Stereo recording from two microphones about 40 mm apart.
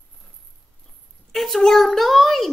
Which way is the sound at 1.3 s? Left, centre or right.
Centre.